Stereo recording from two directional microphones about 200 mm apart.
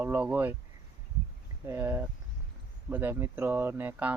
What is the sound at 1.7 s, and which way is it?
Speech, 10° right (ahead or behind).